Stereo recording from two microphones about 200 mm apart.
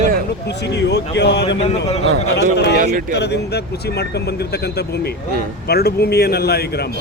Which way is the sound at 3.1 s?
55° left (ahead or behind).